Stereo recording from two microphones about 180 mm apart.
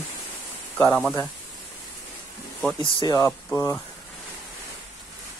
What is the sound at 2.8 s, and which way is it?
Speech, 25° left (ahead or behind).